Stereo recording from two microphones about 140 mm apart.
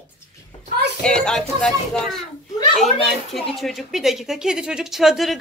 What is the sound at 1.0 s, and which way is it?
A woman's voice, 5° left (ahead or behind).